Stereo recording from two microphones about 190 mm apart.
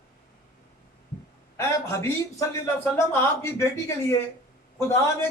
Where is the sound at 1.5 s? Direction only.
15° left (ahead or behind).